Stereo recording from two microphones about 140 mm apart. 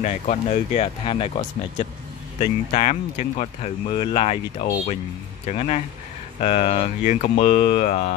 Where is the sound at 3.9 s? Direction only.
35° left (ahead or behind).